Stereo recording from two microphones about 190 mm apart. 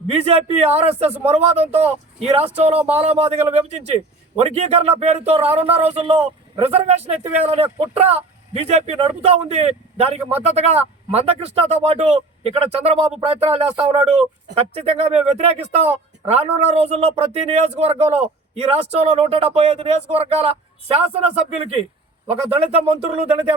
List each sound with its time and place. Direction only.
0.1 s speech: 30° right (ahead or behind)
22.3 s speech: 30° right (ahead or behind)